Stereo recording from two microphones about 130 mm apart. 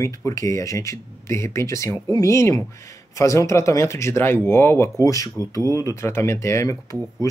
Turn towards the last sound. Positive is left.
turn(degrees=25)  # may be behind; listen again after turning